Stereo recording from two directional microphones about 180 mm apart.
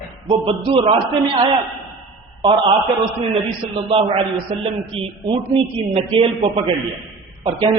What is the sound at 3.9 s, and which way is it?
A man's voice, 30° right (ahead or behind).